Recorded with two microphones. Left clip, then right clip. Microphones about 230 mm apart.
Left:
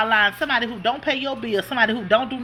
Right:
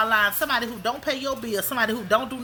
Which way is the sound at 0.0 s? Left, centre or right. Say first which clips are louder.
Left 2 dB; centre.